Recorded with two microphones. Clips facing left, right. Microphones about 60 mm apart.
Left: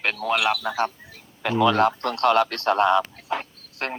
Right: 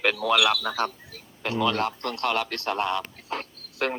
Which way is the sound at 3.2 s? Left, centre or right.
Centre.